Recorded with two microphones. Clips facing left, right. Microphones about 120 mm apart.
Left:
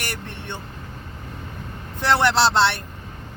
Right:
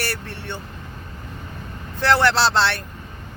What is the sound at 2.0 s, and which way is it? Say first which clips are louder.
Speech: right 1 dB; 15° left (ahead or behind).